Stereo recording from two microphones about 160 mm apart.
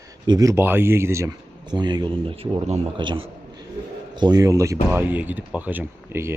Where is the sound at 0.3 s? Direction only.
20° right (ahead or behind); by 2.8 s 40° right (ahead or behind).